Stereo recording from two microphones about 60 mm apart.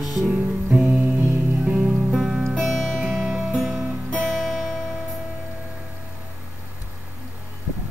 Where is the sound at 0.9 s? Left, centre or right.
Right.